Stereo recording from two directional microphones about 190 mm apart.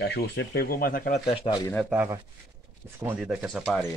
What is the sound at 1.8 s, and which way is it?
Speech, 10° right (ahead or behind).